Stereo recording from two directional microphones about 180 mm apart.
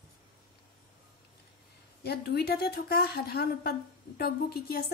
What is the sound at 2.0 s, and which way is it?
A woman's voice, 60° left (ahead or behind).